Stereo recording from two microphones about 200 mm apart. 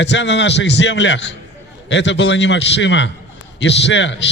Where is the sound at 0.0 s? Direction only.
60° left (ahead or behind).